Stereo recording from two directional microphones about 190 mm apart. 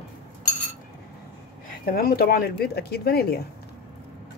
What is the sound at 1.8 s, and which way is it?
Speech, 50° left (ahead or behind).